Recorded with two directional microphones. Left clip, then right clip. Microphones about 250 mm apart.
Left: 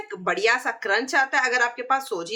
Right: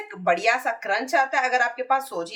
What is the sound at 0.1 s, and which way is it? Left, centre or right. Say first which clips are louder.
Speech: right 1 dB; centre.